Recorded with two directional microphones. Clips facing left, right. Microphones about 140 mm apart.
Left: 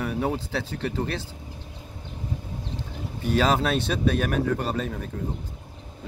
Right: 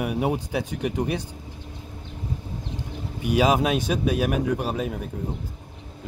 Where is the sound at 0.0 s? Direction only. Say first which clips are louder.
Right 2 dB; 15° right (ahead or behind).